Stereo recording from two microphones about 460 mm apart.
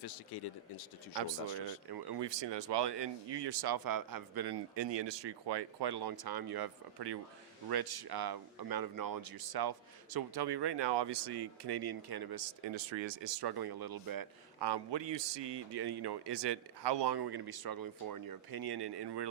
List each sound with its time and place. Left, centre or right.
0.0 s speech: left
1.1 s speech: right
1.9 s speech: right